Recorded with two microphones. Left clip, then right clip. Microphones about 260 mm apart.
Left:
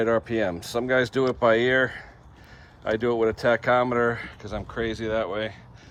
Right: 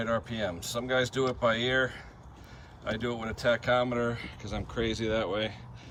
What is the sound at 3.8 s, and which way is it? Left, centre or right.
Speech, left.